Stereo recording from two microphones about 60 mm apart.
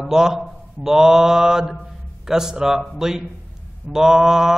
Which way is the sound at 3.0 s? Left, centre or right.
Centre.